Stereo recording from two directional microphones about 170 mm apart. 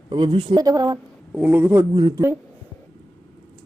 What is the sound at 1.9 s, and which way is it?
Speech, 25° right (ahead or behind).